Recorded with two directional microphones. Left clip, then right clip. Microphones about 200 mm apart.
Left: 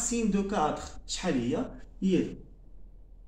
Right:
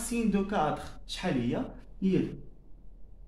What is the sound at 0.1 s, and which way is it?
Speech, 30° right (ahead or behind).